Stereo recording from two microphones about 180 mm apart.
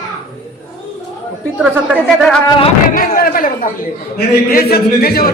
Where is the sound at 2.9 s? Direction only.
50° left (ahead or behind).